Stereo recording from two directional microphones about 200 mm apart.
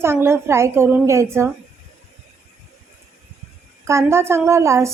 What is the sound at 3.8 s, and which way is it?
A woman's voice, 15° right (ahead or behind).